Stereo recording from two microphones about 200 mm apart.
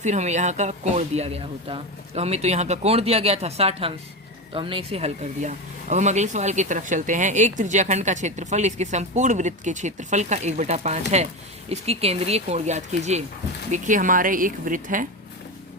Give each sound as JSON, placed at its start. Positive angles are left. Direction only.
{"t": 0.0, "sound": "speech", "side_deg": -35}